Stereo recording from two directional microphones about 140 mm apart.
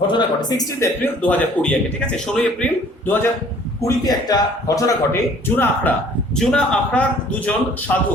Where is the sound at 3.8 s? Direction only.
25° left (ahead or behind); by 7.9 s 10° left (ahead or behind).